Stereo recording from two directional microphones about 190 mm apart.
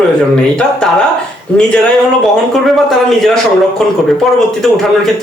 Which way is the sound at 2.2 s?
Centre (ahead or behind).